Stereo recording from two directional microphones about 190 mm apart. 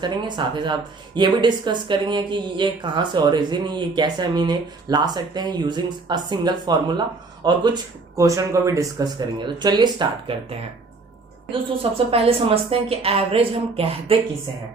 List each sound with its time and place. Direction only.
0.0 s speech: 25° right (ahead or behind)
11.8 s speech: 30° right (ahead or behind)